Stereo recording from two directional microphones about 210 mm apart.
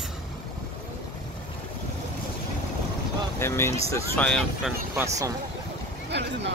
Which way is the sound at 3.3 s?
10° left (ahead or behind).